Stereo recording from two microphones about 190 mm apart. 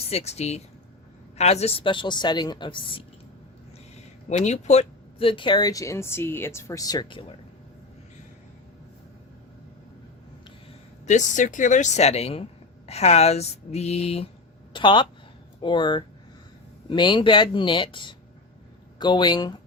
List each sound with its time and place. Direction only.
0.0 s speech: 30° left (ahead or behind)
3.9 s speech: 35° left (ahead or behind)
11.0 s speech: 40° left (ahead or behind); by 19.5 s 20° left (ahead or behind)